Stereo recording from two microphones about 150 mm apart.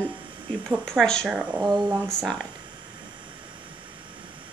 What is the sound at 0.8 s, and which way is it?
Speech, 5° left (ahead or behind).